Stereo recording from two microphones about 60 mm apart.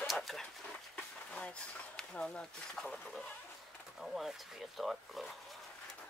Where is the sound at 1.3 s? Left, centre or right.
Centre.